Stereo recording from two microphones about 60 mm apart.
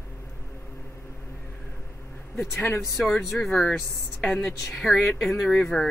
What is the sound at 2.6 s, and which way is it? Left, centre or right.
Speech, left.